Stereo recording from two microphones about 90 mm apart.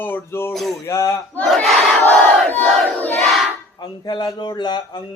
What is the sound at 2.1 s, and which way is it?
Crowd, 15° left (ahead or behind).